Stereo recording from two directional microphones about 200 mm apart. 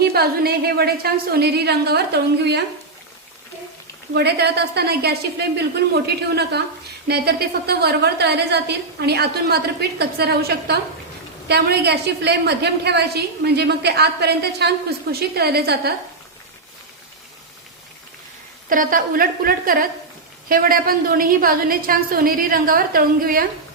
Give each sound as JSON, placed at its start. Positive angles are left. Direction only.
{"t": 0.0, "sound": "a woman's voice", "side_deg": -50}
{"t": 4.1, "sound": "a woman's voice", "side_deg": -55}
{"t": 18.7, "sound": "a woman's voice", "side_deg": -45}